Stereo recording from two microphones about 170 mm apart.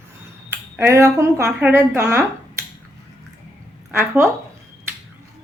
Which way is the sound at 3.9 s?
15° right (ahead or behind).